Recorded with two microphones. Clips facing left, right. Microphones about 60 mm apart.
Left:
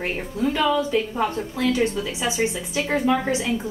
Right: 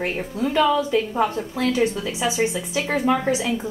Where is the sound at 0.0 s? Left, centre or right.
Centre.